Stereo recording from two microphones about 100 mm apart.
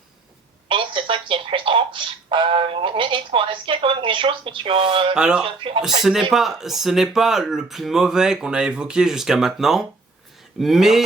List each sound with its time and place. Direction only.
0.7 s speech: 60° right (ahead or behind)
5.1 s speech: 5° right (ahead or behind)
5.4 s speech: 55° right (ahead or behind)
6.0 s speech: 5° right (ahead or behind)